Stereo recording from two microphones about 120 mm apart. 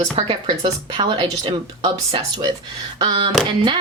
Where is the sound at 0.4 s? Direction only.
45° right (ahead or behind).